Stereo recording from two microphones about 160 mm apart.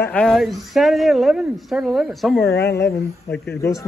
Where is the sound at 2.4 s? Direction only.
90° left.